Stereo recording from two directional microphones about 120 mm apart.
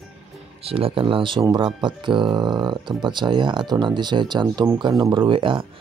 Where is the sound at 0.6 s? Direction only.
50° right (ahead or behind).